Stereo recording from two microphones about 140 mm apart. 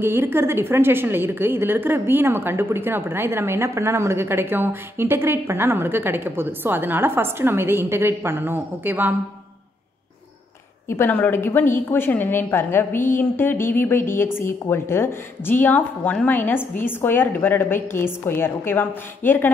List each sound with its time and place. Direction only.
0.0 s a woman's voice: 15° right (ahead or behind)
10.9 s a woman's voice: 15° left (ahead or behind)